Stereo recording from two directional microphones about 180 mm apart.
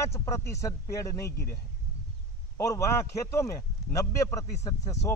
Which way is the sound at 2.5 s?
15° left (ahead or behind).